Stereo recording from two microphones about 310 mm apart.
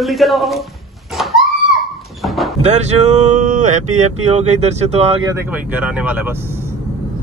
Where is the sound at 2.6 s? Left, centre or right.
Right.